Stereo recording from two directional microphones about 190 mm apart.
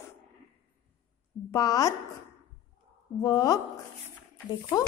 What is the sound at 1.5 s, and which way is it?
Speech, 20° left (ahead or behind).